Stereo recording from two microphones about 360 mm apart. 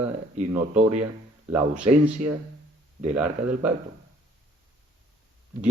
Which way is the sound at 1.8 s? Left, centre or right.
Right.